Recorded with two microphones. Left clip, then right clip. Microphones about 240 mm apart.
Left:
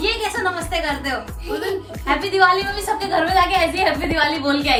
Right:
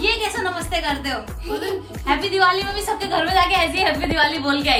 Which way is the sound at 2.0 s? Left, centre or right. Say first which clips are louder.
Left 1 dB; centre.